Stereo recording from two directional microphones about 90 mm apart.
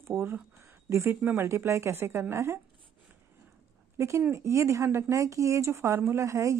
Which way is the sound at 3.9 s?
30° right (ahead or behind).